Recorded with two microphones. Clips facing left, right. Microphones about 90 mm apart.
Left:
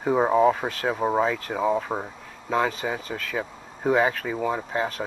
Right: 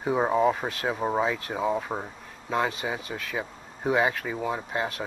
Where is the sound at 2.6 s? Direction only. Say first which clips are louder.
Left 2 dB; 40° left (ahead or behind).